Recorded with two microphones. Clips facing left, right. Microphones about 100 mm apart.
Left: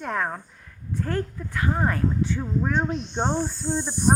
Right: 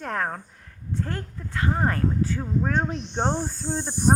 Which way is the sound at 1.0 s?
25° right (ahead or behind).